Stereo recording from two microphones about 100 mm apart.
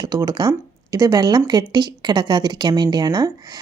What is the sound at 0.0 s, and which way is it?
A woman's voice, 40° right (ahead or behind).